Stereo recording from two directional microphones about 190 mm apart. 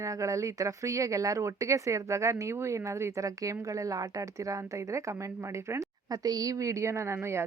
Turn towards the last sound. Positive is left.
turn(degrees=-15)  # may be behind; listen again after turning